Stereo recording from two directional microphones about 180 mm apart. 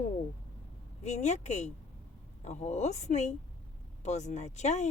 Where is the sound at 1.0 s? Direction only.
40° left (ahead or behind).